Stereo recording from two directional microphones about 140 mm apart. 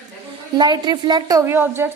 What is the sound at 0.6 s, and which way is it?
A woman's voice, 30° right (ahead or behind).